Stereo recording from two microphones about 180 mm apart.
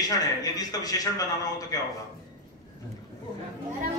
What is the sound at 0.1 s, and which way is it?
A man's voice, 20° left (ahead or behind).